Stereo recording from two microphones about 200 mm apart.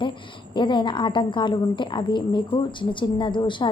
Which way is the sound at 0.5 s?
25° left (ahead or behind).